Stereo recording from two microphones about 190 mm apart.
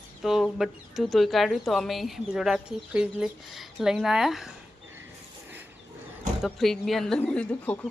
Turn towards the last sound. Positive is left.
turn(degrees=10)  # may be behind; listen again after turning